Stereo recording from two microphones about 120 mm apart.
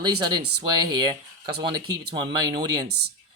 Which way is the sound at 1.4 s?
35° right (ahead or behind).